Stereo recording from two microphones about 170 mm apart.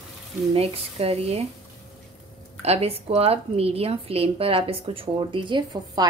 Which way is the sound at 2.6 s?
35° right (ahead or behind).